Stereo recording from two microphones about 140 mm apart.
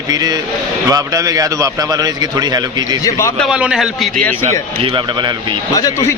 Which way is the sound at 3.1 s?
20° left (ahead or behind).